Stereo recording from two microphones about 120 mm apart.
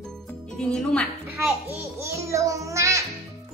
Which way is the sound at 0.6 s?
5° left (ahead or behind).